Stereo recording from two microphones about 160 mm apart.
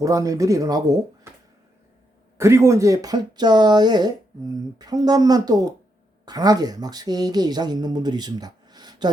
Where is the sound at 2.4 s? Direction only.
15° right (ahead or behind).